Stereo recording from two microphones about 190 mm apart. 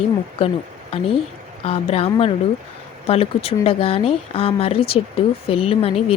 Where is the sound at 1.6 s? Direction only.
30° left (ahead or behind).